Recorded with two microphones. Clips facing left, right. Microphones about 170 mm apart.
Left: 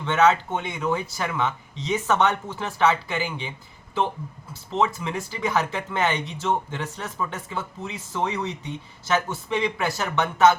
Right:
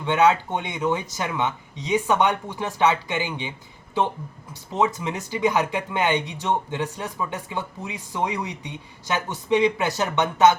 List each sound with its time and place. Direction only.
0.0 s speech: 15° right (ahead or behind)
4.5 s speech: 15° right (ahead or behind)